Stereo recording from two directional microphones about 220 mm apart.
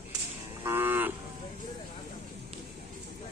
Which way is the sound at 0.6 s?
10° right (ahead or behind).